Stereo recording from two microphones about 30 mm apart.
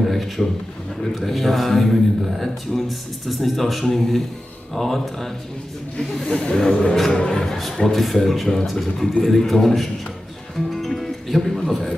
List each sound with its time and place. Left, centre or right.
0.0 s a sound: centre
1.2 s speech: centre
6.2 s speech: left
6.5 s speech: centre
7.4 s a sound: centre
7.8 s speech: centre
10.7 s music: centre